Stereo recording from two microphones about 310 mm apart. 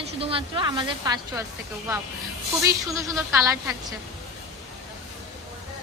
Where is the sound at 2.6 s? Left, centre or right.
Centre.